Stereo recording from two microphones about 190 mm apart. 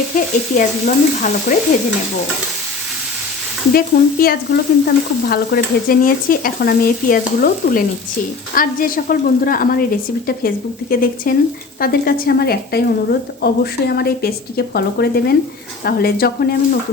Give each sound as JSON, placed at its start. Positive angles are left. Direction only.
{"t": 0.5, "sound": "stir", "side_deg": 40}
{"t": 3.7, "sound": "frying", "side_deg": 50}
{"t": 11.8, "sound": "a woman's voice", "side_deg": 50}
{"t": 15.8, "sound": "frying", "side_deg": 55}